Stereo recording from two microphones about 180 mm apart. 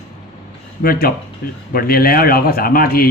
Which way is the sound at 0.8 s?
55° left (ahead or behind).